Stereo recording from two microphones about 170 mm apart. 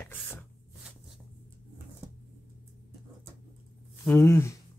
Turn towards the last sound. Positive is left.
turn(degrees=15)  # may be behind; listen again after turning